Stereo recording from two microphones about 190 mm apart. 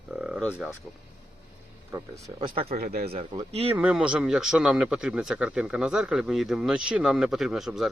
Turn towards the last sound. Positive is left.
turn(degrees=-5)  # may be behind; listen again after turning